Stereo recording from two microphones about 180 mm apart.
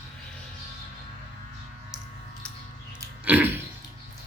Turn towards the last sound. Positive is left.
turn(degrees=-10)  # may be behind; listen again after turning